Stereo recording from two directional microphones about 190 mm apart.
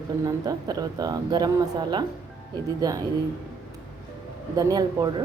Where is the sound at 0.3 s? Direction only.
20° right (ahead or behind).